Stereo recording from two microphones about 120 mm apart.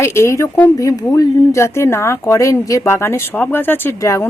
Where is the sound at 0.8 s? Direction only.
30° left (ahead or behind).